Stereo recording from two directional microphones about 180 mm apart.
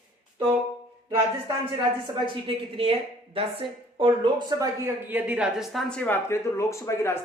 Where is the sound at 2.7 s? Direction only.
30° right (ahead or behind).